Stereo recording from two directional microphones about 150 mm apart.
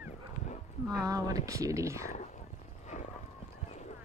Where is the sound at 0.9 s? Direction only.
25° right (ahead or behind).